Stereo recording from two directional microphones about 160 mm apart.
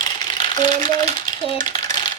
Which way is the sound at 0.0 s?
30° left (ahead or behind).